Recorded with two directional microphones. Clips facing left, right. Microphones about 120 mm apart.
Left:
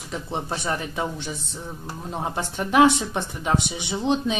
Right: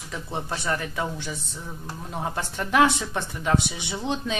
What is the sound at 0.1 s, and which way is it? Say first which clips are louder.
Speech: left 2 dB; 20° left (ahead or behind).